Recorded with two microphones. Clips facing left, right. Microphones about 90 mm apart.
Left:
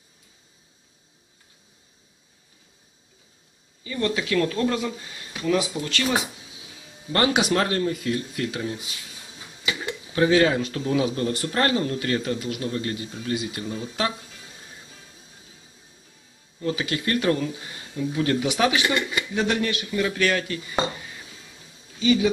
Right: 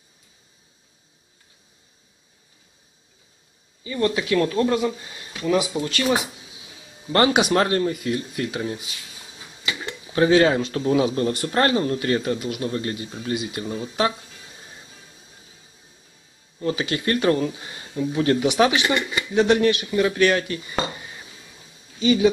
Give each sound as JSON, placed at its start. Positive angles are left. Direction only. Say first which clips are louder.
{"t": 3.8, "sound": "speech", "louder": "right 3 dB", "side_deg": -20}
{"t": 7.1, "sound": "speech", "louder": "right 3 dB", "side_deg": -30}
{"t": 9.7, "sound": "a sound", "louder": "left 1 dB", "side_deg": 5}
{"t": 10.1, "sound": "speech", "louder": "right 2 dB", "side_deg": -30}
{"t": 16.5, "sound": "speech", "louder": "right 2 dB", "side_deg": -30}